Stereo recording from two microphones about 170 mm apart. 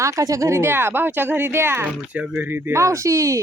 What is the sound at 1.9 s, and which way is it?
Speech, 5° right (ahead or behind).